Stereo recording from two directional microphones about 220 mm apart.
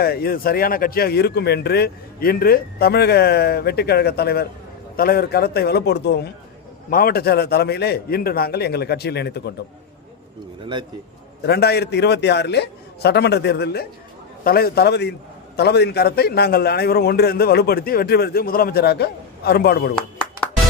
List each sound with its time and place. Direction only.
0.0 s speech: 45° left (ahead or behind)
11.4 s speech: 50° left (ahead or behind)
20.0 s a sound: 5° left (ahead or behind)